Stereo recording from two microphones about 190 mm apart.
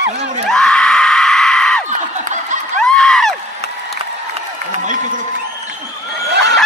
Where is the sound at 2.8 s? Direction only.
5° left (ahead or behind).